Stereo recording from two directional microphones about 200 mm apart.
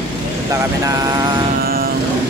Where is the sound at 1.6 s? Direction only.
50° right (ahead or behind).